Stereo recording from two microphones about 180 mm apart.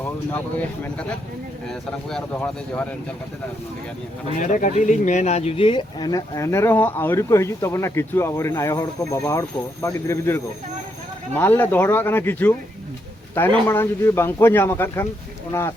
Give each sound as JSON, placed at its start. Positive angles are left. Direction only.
{"t": 1.6, "sound": "speech", "side_deg": 5}
{"t": 4.4, "sound": "speech", "side_deg": 45}
{"t": 13.7, "sound": "speech", "side_deg": 15}